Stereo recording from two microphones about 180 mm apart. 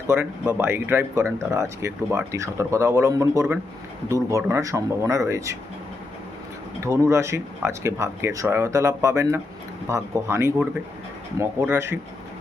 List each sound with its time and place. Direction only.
0.1 s speech: 10° right (ahead or behind)
6.8 s speech: 15° right (ahead or behind)